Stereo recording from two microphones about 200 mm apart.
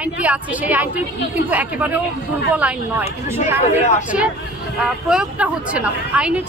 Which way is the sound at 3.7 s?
35° left (ahead or behind).